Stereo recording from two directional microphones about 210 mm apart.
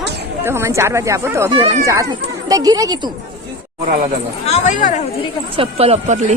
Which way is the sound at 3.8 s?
40° right (ahead or behind).